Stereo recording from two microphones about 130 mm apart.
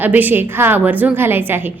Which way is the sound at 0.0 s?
15° right (ahead or behind).